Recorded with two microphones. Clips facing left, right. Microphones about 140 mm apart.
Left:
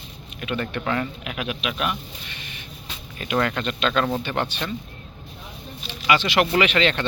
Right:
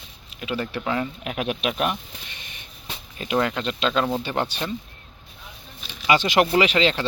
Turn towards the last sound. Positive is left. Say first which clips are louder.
# right 1 dB
turn(degrees=-30)  # may be behind; listen again after turning